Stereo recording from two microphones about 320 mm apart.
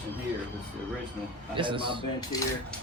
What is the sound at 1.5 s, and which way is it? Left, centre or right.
Speech, centre.